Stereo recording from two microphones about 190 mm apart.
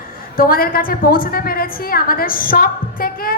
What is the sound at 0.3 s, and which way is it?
A woman's voice, 50° left (ahead or behind).